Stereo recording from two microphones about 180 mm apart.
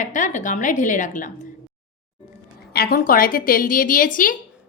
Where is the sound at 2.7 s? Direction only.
55° left (ahead or behind).